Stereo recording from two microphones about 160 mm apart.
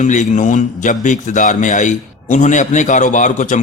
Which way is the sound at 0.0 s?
50° left (ahead or behind).